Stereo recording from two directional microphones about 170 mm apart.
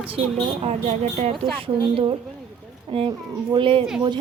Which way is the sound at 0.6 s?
40° right (ahead or behind).